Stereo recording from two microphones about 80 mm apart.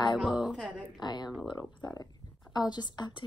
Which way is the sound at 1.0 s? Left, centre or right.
Left.